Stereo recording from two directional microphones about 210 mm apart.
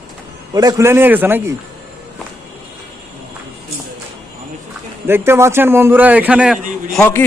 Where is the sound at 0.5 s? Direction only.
15° right (ahead or behind).